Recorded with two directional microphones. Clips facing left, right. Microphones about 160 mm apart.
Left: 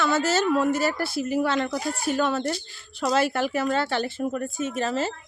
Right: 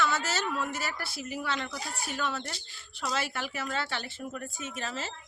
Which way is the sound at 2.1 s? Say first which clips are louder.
Left 8 dB; 45° left (ahead or behind).